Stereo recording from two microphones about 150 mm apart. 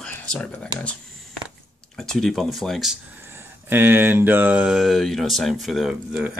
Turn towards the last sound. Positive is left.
turn(degrees=-5)  # may be behind; listen again after turning